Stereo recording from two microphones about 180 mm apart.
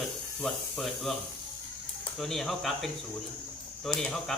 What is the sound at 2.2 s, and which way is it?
Speech, centre (ahead or behind).